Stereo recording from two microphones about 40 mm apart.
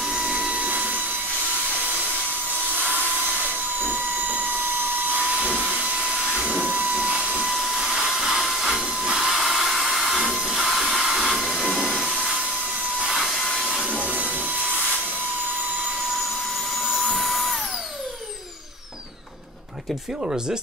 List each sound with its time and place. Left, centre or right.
0.1 s vacuum cleaner: right
0.6 s a sound: right
3.8 s printer: right
5.4 s vacuum cleaner: right
6.6 s steam: right
7.0 s a sound: right
7.4 s hair dryer: centre
10.5 s train: centre
11.1 s a sound: centre
11.5 s train: centre
13.2 s vacuum cleaner: centre
14.0 s a sound: right
17.2 s drill: centre